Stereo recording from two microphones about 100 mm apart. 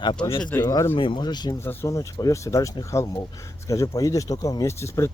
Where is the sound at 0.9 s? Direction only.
55° left (ahead or behind).